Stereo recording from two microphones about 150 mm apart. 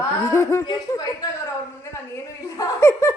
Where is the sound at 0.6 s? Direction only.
30° left (ahead or behind).